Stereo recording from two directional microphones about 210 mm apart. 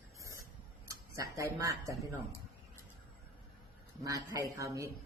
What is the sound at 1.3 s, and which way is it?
Speech, 15° right (ahead or behind).